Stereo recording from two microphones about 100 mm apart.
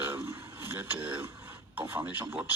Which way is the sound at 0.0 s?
20° right (ahead or behind).